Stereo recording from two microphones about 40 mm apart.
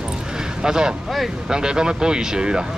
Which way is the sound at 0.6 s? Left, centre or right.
Centre.